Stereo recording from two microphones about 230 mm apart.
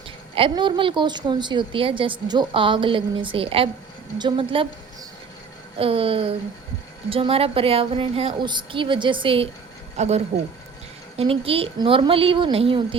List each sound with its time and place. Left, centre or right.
0.3 s a woman's voice: right
5.7 s a woman's voice: right